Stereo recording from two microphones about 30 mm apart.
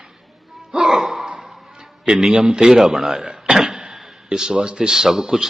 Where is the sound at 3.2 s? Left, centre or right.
Right.